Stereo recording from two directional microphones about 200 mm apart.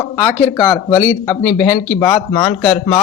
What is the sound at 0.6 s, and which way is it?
A man's voice, 20° left (ahead or behind).